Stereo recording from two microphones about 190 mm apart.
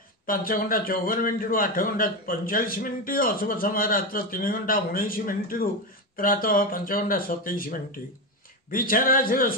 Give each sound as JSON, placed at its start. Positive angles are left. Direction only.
{"t": 0.3, "sound": "a man's voice", "side_deg": 50}